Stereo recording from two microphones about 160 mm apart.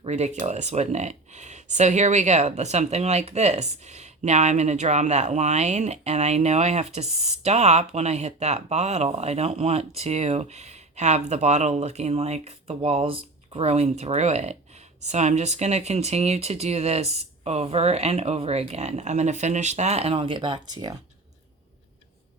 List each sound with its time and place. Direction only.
0.0 s speech: 45° right (ahead or behind); by 20.9 s 25° right (ahead or behind)